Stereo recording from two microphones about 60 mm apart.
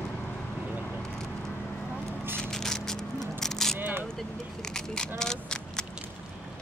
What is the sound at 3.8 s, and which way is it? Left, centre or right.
Single-lens reflex camera, right.